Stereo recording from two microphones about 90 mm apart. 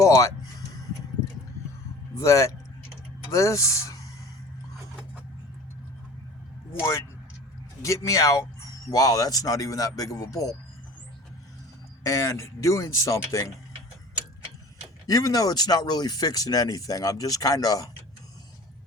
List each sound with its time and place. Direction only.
0.0 s speech: 35° left (ahead or behind)
2.1 s speech: 35° left (ahead or behind)
6.7 s speech: 30° left (ahead or behind)
12.0 s speech: 35° left (ahead or behind)
15.0 s speech: 40° left (ahead or behind)